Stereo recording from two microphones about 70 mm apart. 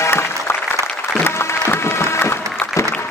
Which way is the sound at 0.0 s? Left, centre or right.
Left.